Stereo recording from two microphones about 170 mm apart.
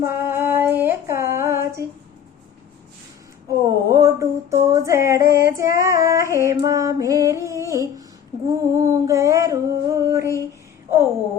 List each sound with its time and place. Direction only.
0.0 s female singing: 15° right (ahead or behind)
3.5 s female singing: 20° right (ahead or behind)
8.4 s a sound: 20° right (ahead or behind)